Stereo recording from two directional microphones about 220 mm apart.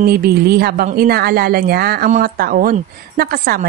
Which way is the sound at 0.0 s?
45° right (ahead or behind).